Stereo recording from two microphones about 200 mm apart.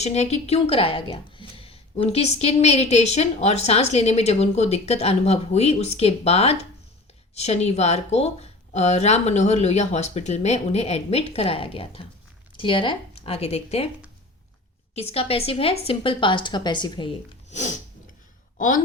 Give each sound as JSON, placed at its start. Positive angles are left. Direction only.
{"t": 0.0, "sound": "a woman's voice", "side_deg": 35}
{"t": 14.9, "sound": "a woman's voice", "side_deg": 30}
{"t": 18.5, "sound": "speech", "side_deg": 40}